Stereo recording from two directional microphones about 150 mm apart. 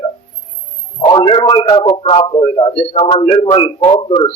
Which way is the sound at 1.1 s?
35° left (ahead or behind).